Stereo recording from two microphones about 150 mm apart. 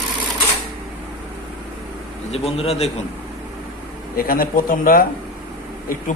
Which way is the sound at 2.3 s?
45° left (ahead or behind).